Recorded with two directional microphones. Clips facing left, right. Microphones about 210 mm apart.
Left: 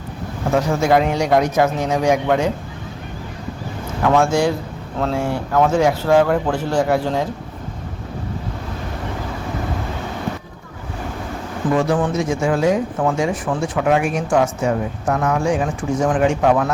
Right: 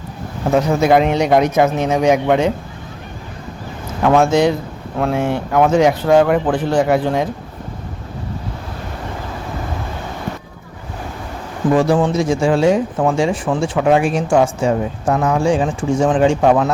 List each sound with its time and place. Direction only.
0.5 s speech: 20° right (ahead or behind)
4.0 s speech: 20° right (ahead or behind)
11.7 s speech: 35° right (ahead or behind)